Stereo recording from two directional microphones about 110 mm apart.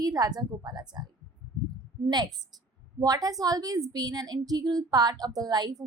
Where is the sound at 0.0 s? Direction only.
35° right (ahead or behind).